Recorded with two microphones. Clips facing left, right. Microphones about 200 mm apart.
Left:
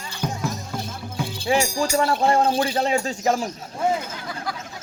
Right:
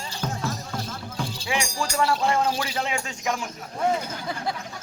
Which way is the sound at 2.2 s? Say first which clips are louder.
Left 5 dB; 35° left (ahead or behind).